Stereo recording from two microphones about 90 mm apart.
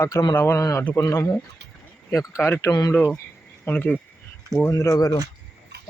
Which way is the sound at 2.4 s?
25° left (ahead or behind).